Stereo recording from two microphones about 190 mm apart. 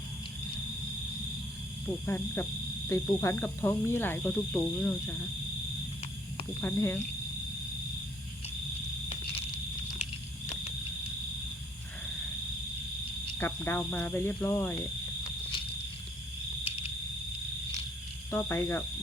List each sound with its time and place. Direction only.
2.0 s speech: 10° left (ahead or behind)
6.6 s speech: 10° left (ahead or behind)
13.4 s speech: 10° left (ahead or behind)
14.8 s cricket: 25° left (ahead or behind)
18.3 s speech: 10° left (ahead or behind)